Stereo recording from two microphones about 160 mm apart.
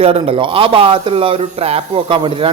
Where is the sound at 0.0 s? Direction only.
35° right (ahead or behind).